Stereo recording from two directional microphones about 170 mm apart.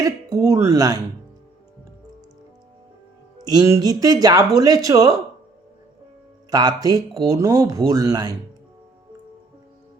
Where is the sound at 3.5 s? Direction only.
20° right (ahead or behind).